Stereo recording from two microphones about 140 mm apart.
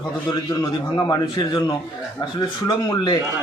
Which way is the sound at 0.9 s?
25° left (ahead or behind).